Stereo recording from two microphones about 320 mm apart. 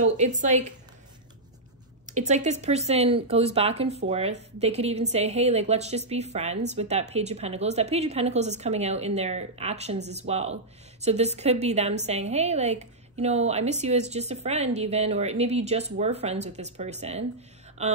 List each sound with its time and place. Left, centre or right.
0.0 s a woman's voice: right
2.2 s a woman's voice: right